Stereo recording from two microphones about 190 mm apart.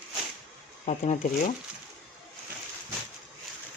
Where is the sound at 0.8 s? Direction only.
40° left (ahead or behind).